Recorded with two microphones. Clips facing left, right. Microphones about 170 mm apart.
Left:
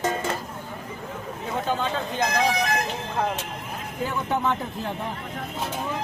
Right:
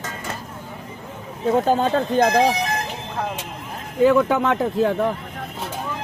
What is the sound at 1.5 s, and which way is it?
Speech, 40° right (ahead or behind).